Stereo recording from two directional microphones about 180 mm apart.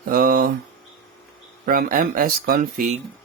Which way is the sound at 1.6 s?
55° right (ahead or behind).